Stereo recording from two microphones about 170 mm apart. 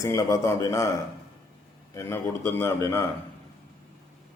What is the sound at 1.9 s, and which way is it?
A man's voice, 15° left (ahead or behind).